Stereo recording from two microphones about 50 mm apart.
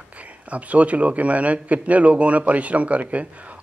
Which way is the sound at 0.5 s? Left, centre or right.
Right.